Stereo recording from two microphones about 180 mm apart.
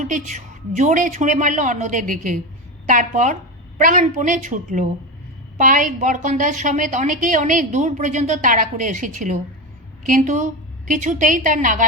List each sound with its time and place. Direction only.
0.0 s a woman's voice: 40° right (ahead or behind)